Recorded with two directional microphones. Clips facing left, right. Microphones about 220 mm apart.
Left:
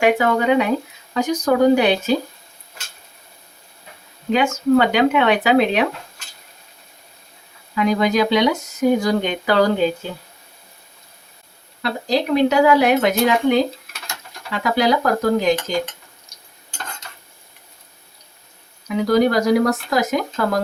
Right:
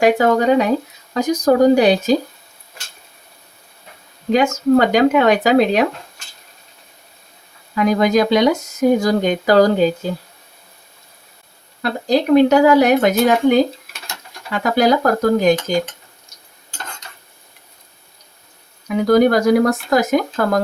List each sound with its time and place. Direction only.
0.0 s speech: 40° right (ahead or behind)
4.3 s speech: 40° right (ahead or behind)
7.8 s speech: 45° right (ahead or behind)
11.8 s speech: 45° right (ahead or behind)
19.0 s speech: 50° right (ahead or behind)